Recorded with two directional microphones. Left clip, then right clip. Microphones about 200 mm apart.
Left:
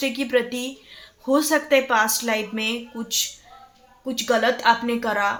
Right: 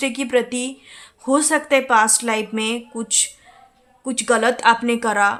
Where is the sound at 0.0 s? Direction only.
30° right (ahead or behind).